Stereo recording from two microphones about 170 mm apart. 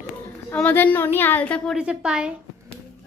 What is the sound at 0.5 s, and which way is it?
A woman's voice, 10° left (ahead or behind).